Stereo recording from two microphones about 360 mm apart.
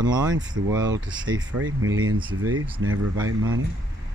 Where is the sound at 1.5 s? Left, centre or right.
Right.